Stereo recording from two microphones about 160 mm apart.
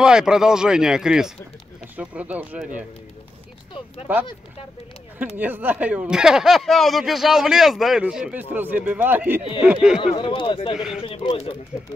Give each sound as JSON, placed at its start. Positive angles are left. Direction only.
{"t": 0.0, "sound": "speech", "side_deg": -5}
{"t": 4.1, "sound": "speech", "side_deg": -10}
{"t": 10.0, "sound": "speech", "side_deg": 30}
{"t": 10.7, "sound": "speech", "side_deg": -5}
{"t": 11.0, "sound": "speech", "side_deg": 30}